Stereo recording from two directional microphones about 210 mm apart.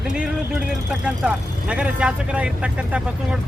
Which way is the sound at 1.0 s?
5° right (ahead or behind).